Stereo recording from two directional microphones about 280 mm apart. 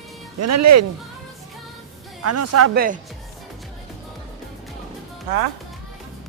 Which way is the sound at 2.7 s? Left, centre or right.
Right.